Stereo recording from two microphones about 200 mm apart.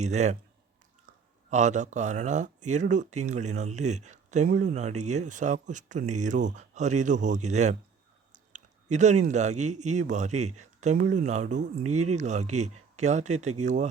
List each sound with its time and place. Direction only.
0.0 s speech: 35° right (ahead or behind)
1.1 s a sound: 40° right (ahead or behind)
1.5 s speech: 35° right (ahead or behind)
8.3 s chewing: 35° right (ahead or behind)
9.2 s speech: 35° right (ahead or behind)